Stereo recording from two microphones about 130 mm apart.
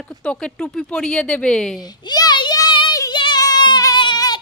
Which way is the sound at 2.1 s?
35° left (ahead or behind).